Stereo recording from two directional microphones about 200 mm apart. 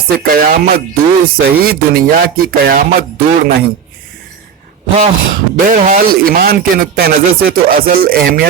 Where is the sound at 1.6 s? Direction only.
45° right (ahead or behind).